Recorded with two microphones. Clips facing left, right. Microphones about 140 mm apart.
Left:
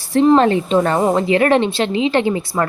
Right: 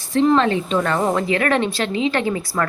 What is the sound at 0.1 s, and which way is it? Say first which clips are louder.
A woman's voice: left 4 dB; 35° left (ahead or behind).